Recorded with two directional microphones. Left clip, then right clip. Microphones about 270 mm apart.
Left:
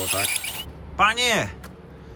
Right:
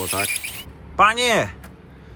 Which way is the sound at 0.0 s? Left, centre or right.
Centre.